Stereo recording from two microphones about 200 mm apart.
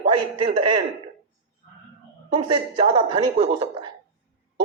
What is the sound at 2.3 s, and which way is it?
A man's voice, 25° right (ahead or behind).